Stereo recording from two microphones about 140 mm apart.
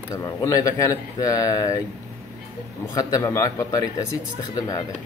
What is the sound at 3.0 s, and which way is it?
Speech, 25° left (ahead or behind).